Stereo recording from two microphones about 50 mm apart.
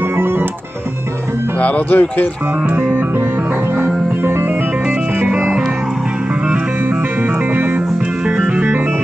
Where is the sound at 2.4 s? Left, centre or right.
Right.